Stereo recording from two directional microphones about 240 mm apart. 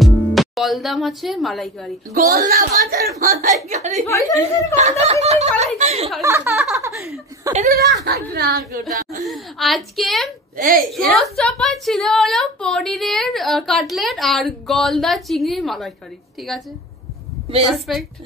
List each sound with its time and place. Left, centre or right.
0.0 s speech: centre
2.1 s speech: right
4.1 s speech: centre
4.7 s speech: right
6.2 s a woman's voice: centre
7.5 s speech: right
9.3 s a woman's voice: centre
10.6 s speech: right
10.9 s a woman's voice: centre
17.7 s a woman's voice: centre